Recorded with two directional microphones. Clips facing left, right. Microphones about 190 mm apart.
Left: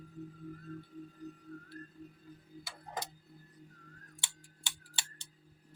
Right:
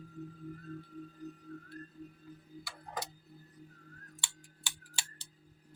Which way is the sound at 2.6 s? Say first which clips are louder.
Even; 20° left (ahead or behind).